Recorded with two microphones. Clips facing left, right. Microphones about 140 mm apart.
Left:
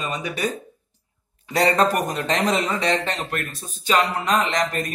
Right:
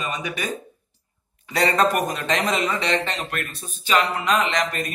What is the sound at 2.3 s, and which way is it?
A man's voice, 35° left (ahead or behind).